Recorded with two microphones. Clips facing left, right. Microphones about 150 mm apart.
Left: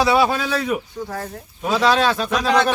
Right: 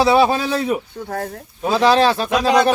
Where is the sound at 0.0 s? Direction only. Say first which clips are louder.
Right 3 dB; 30° right (ahead or behind).